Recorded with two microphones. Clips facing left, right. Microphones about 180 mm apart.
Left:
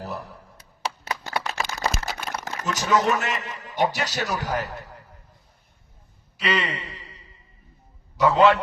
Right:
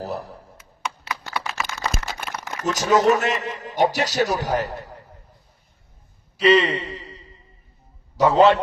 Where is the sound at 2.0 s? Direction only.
40° left (ahead or behind).